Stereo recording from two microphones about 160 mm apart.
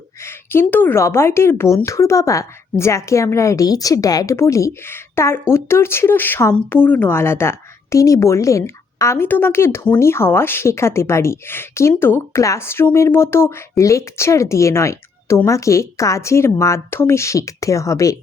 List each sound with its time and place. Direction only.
0.2 s a woman's voice: 15° left (ahead or behind)